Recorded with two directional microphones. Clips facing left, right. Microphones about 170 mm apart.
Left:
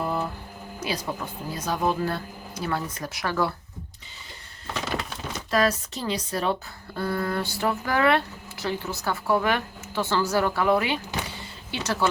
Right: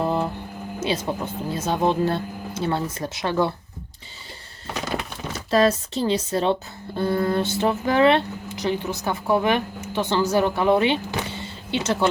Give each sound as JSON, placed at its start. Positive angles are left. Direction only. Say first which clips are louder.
{"t": 0.0, "sound": "a sound", "louder": "right 5 dB", "side_deg": -25}
{"t": 0.8, "sound": "speech", "louder": "right 5 dB", "side_deg": -25}
{"t": 5.5, "sound": "speech", "louder": "right 5 dB", "side_deg": -25}